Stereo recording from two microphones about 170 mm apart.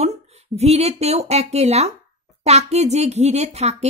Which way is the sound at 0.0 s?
40° right (ahead or behind).